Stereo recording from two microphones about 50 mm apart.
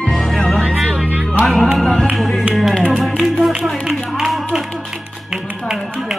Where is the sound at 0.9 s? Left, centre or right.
Right.